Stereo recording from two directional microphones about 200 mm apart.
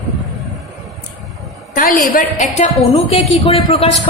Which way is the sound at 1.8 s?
45° left (ahead or behind).